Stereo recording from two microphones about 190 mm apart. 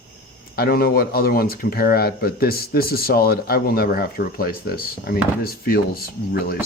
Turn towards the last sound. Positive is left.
turn(degrees=55)  # may be behind; listen again after turning